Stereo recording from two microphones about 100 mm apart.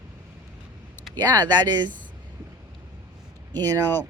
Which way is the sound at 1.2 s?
40° right (ahead or behind).